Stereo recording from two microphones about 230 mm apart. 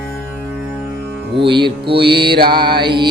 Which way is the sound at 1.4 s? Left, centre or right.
Right.